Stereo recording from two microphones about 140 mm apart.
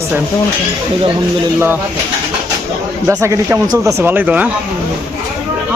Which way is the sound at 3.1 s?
20° right (ahead or behind).